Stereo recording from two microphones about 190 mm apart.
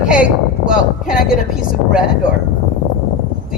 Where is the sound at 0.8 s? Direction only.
45° left (ahead or behind).